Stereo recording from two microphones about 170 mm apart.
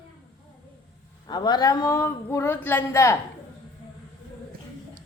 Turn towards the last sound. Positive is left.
turn(degrees=15)  # may be behind; listen again after turning